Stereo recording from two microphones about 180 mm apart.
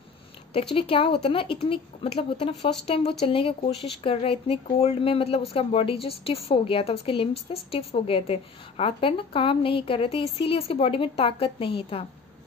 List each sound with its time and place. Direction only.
0.7 s a woman's voice: 30° left (ahead or behind)